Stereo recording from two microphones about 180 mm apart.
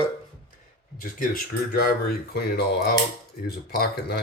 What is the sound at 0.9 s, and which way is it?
Speech, 55° left (ahead or behind).